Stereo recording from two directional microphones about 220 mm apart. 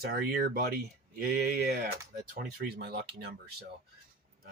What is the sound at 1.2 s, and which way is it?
Speech, 45° right (ahead or behind).